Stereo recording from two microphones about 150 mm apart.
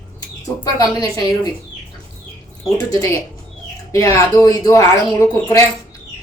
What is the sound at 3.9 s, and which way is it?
Speech, 20° left (ahead or behind).